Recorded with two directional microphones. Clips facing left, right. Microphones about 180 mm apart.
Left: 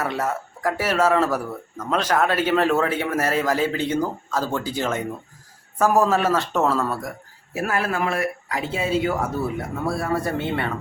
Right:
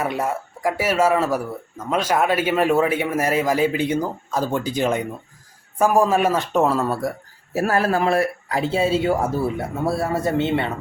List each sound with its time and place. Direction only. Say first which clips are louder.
0.0 s a man's voice: right 2 dB; 15° right (ahead or behind)
6.8 s speech: right 4 dB; 30° right (ahead or behind)